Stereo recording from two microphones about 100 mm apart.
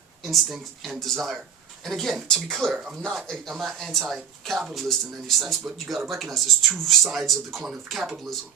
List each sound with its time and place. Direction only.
0.3 s speech: centre (ahead or behind)